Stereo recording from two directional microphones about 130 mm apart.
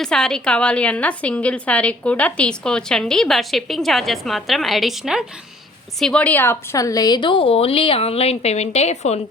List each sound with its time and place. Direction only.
0.0 s a woman's voice: 5° left (ahead or behind); by 9.2 s 55° left (ahead or behind)